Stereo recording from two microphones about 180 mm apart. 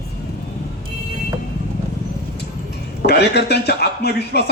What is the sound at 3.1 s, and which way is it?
A man's voice, 70° left (ahead or behind).